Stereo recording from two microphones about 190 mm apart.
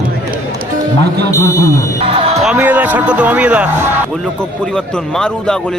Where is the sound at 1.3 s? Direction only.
15° left (ahead or behind).